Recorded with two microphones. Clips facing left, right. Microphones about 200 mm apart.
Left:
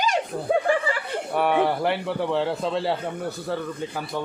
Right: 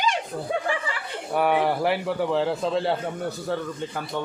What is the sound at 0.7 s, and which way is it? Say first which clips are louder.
Chuckle: left 6 dB; 45° left (ahead or behind).